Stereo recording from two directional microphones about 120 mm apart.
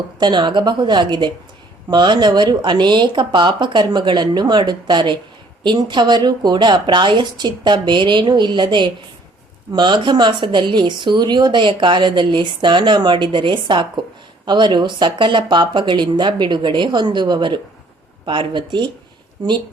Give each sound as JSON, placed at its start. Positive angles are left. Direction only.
{"t": 0.2, "sound": "a woman's voice", "side_deg": -40}